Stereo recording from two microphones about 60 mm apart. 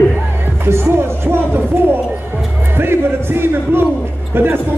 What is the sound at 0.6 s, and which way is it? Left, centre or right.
Music, right.